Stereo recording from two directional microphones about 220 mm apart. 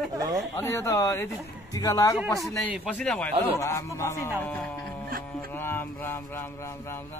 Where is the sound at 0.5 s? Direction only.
10° left (ahead or behind).